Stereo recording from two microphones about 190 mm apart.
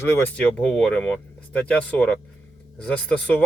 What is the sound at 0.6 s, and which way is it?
Speech, centre (ahead or behind).